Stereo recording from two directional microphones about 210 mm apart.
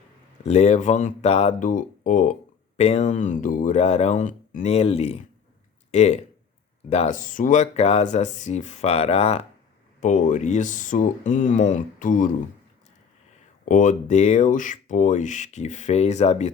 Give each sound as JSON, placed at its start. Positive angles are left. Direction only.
{"t": 0.4, "sound": "speech", "side_deg": 30}
{"t": 13.7, "sound": "speech", "side_deg": 35}